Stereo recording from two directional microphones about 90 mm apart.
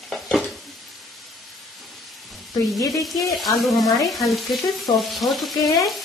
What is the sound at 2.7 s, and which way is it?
Speech, 40° left (ahead or behind).